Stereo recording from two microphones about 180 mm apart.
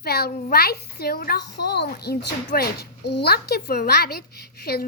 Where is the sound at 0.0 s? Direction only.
60° left (ahead or behind).